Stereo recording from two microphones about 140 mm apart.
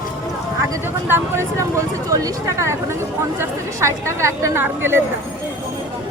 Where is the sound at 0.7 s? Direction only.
15° right (ahead or behind).